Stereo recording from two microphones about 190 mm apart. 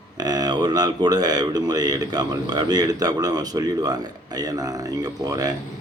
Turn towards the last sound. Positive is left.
turn(degrees=-20)  # may be behind; listen again after turning